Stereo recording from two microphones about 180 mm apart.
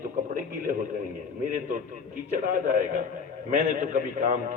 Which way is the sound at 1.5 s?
45° right (ahead or behind).